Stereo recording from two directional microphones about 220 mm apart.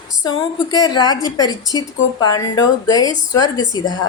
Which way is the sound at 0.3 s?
15° left (ahead or behind).